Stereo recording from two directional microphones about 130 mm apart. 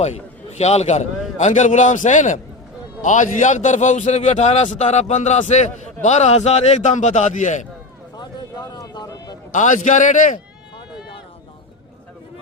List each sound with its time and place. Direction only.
0.0 s a man's voice: 60° left (ahead or behind)
8.1 s a sound: 30° left (ahead or behind)
9.5 s a man's voice: 75° left (ahead or behind)